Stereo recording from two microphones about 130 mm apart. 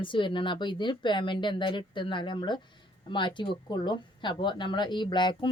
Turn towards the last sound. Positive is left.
turn(degrees=35)  # may be behind; listen again after turning